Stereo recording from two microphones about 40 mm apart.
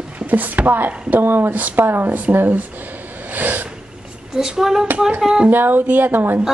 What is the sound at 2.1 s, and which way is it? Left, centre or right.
Speech, right.